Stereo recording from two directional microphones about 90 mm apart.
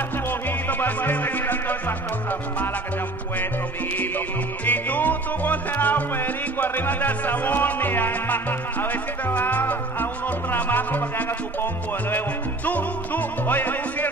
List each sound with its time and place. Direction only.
0.3 s music: 20° left (ahead or behind)
3.9 s music: 20° left (ahead or behind)